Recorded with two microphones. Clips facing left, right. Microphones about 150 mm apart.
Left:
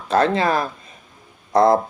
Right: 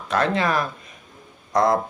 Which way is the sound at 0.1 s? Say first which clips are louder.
Left 4 dB; 35° left (ahead or behind).